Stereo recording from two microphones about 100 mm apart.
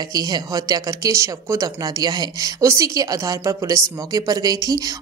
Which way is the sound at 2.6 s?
30° right (ahead or behind).